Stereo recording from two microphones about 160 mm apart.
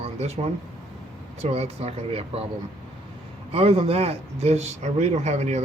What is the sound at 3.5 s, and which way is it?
Speech, 40° right (ahead or behind).